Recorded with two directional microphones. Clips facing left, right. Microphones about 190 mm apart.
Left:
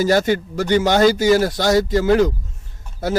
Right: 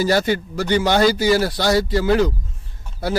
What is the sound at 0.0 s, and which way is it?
Speech, 45° left (ahead or behind).